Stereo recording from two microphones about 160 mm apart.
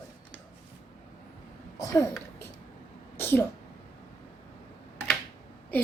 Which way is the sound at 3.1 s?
15° left (ahead or behind).